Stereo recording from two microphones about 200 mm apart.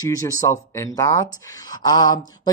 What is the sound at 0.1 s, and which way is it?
Speech, 15° left (ahead or behind).